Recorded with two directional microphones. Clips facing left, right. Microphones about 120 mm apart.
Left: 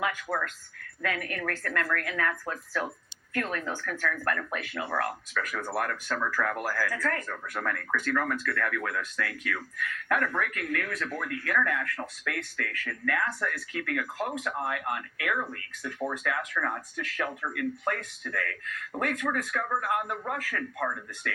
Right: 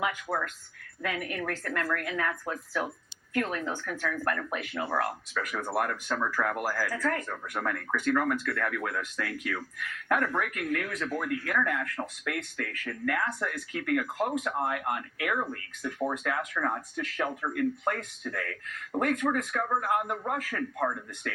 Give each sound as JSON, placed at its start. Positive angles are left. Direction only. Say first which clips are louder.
{"t": 0.0, "sound": "speech", "louder": "even", "side_deg": -15}